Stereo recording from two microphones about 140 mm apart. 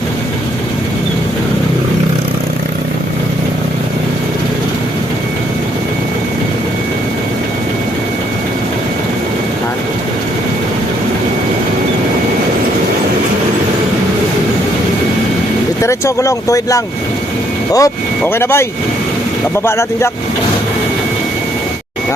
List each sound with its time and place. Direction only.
15.8 s speech: 20° left (ahead or behind)
19.6 s speech: 20° left (ahead or behind)